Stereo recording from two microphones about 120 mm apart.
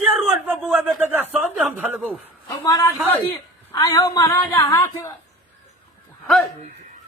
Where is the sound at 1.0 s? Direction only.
15° right (ahead or behind).